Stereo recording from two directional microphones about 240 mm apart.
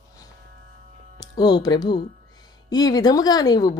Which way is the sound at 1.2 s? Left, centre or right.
Centre.